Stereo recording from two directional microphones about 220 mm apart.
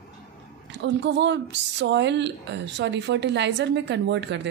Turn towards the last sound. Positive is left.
turn(degrees=-55)  # may be behind; listen again after turning